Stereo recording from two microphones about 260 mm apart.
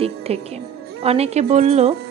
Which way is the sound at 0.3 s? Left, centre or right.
Right.